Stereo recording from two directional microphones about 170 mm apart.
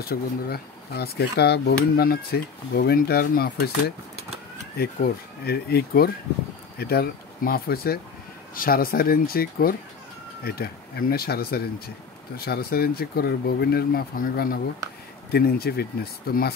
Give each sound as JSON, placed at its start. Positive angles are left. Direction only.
{"t": 0.0, "sound": "speech", "side_deg": 65}
{"t": 4.7, "sound": "speech", "side_deg": 65}